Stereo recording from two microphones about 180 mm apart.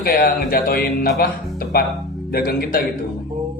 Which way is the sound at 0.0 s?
55° left (ahead or behind).